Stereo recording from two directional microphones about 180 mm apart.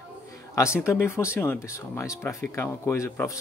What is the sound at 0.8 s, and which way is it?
Speech, 15° left (ahead or behind).